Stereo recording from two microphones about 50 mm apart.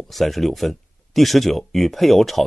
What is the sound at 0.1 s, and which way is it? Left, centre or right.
Speech, centre.